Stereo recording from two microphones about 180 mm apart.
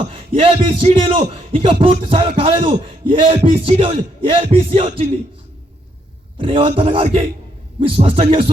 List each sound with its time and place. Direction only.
0.3 s a man's voice: 30° right (ahead or behind)
6.3 s a man's voice: 30° right (ahead or behind)